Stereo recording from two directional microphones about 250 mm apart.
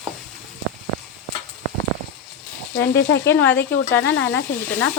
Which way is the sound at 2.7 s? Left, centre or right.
Left.